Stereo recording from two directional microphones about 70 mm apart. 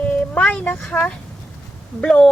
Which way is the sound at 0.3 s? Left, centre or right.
Centre.